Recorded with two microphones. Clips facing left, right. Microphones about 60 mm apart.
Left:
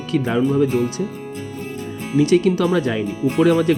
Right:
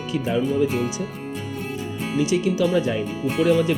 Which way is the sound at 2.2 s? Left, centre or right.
Left.